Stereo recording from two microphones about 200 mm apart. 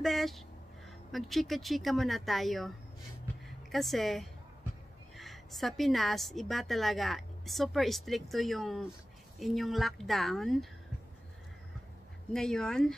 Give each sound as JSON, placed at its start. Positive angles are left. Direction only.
{"t": 0.0, "sound": "a sound", "side_deg": 0}
{"t": 0.8, "sound": "a woman's voice", "side_deg": 0}
{"t": 3.7, "sound": "a woman's voice", "side_deg": 0}
{"t": 12.3, "sound": "a woman's voice", "side_deg": 5}